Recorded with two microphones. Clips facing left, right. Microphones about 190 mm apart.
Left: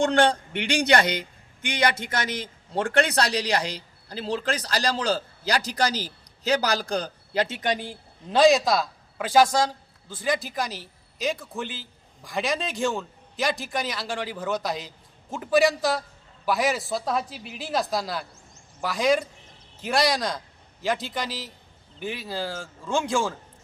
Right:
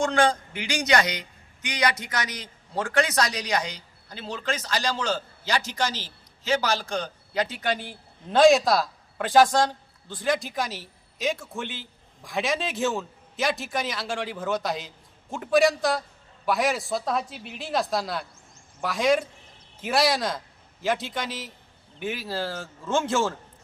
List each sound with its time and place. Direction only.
0.0 s speech: 65° left (ahead or behind)
1.0 s a sound: 55° left (ahead or behind)
2.2 s speech: 55° left (ahead or behind)
3.5 s a man's voice: 30° left (ahead or behind)
8.3 s a man's voice: centre (ahead or behind)